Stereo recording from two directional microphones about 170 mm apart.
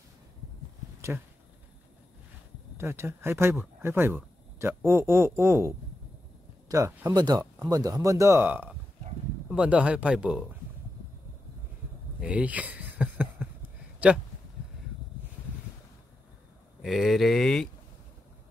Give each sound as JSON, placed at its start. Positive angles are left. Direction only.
{"t": 2.8, "sound": "speech", "side_deg": -15}
{"t": 12.2, "sound": "a sound", "side_deg": -5}
{"t": 16.8, "sound": "speech", "side_deg": 0}